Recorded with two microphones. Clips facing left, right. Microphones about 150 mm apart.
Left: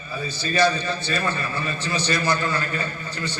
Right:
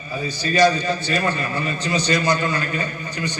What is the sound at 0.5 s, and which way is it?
A man's voice, 15° right (ahead or behind).